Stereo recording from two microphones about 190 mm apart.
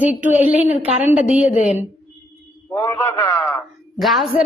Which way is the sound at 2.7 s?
15° left (ahead or behind).